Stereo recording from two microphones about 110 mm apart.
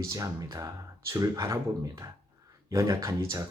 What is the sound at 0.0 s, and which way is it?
Speech, 30° right (ahead or behind).